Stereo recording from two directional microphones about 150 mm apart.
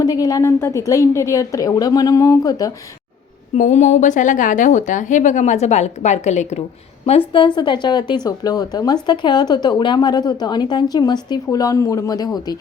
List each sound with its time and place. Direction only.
0.0 s a woman's voice: 25° left (ahead or behind)
3.5 s a woman's voice: 50° left (ahead or behind)
7.3 s a woman's voice: 30° left (ahead or behind)